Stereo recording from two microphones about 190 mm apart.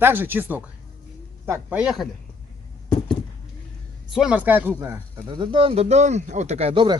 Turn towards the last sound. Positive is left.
turn(degrees=-30)  # may be behind; listen again after turning